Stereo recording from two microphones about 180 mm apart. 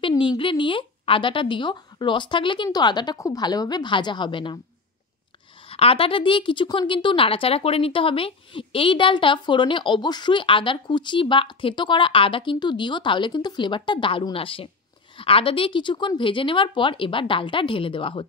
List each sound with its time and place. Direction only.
0.4 s a woman's voice: 30° left (ahead or behind)
5.7 s a woman's voice: 30° left (ahead or behind)